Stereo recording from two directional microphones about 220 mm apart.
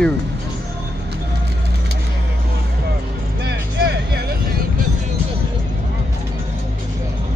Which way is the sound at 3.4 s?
50° right (ahead or behind).